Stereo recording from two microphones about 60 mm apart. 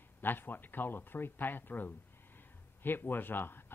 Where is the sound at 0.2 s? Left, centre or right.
Left.